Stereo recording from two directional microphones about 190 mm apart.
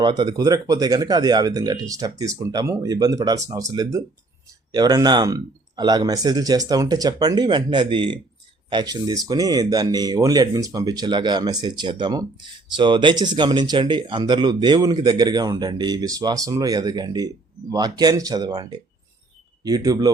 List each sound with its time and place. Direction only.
0.0 s speech: 25° right (ahead or behind)